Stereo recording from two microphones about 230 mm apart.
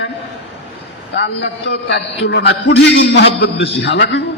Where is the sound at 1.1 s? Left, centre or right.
Left.